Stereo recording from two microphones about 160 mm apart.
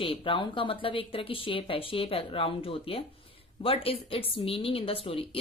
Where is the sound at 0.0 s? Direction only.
30° left (ahead or behind).